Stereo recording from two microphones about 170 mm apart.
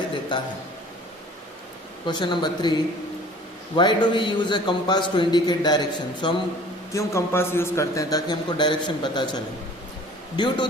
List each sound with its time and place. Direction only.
0.3 s a man's voice: 25° left (ahead or behind)
2.0 s a man's voice: 25° left (ahead or behind)
3.8 s a man's voice: 25° left (ahead or behind)
6.9 s a man's voice: 15° left (ahead or behind)